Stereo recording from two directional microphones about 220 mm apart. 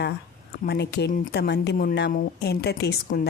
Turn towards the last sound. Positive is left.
turn(degrees=50)  # may be behind; listen again after turning